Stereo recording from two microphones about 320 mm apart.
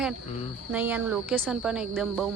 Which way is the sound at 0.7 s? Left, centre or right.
Centre.